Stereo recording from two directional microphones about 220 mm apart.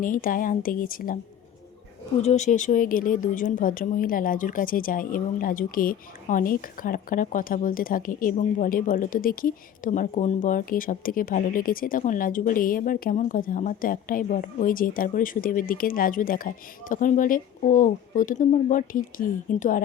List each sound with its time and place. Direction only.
0.0 s a woman's voice: 40° left (ahead or behind)
2.2 s a woman's voice: 30° left (ahead or behind)